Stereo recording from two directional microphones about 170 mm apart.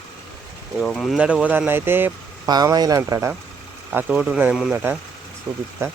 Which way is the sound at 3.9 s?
5° right (ahead or behind).